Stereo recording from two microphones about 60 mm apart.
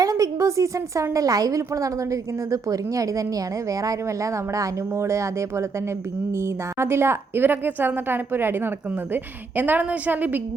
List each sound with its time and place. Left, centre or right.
0.0 s a woman's voice: right